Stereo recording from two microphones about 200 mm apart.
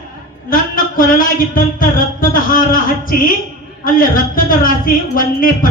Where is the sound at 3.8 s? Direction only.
45° left (ahead or behind).